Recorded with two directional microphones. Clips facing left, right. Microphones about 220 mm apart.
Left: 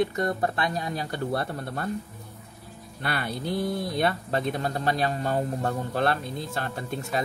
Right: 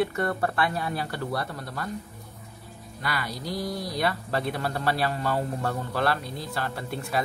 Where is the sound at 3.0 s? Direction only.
30° left (ahead or behind).